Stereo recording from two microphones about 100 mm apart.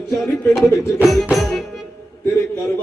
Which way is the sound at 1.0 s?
Centre (ahead or behind).